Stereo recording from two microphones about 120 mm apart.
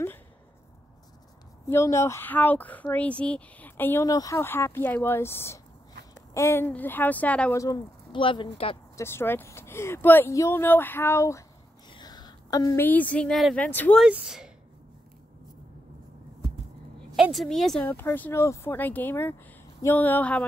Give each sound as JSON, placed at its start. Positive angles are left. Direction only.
{"t": 1.7, "sound": "speech", "side_deg": 20}
{"t": 4.0, "sound": "speech", "side_deg": 30}
{"t": 7.5, "sound": "speech", "side_deg": 30}
{"t": 8.1, "sound": "speech", "side_deg": 45}
{"t": 8.9, "sound": "speech", "side_deg": 20}
{"t": 11.9, "sound": "a sound", "side_deg": 35}
{"t": 12.8, "sound": "speech", "side_deg": 15}
{"t": 13.6, "sound": "speech", "side_deg": 15}
{"t": 13.9, "sound": "a woman's voice", "side_deg": -5}
{"t": 17.1, "sound": "a woman's voice", "side_deg": 0}
{"t": 17.8, "sound": "speech", "side_deg": 15}